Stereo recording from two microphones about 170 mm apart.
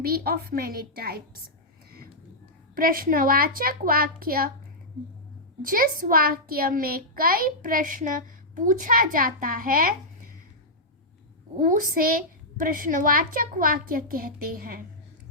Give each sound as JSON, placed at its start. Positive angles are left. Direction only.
{"t": 0.0, "sound": "a child's voice", "side_deg": -65}
{"t": 2.7, "sound": "a child's voice", "side_deg": -55}
{"t": 5.6, "sound": "a child's voice", "side_deg": -55}
{"t": 11.5, "sound": "a child's voice", "side_deg": -55}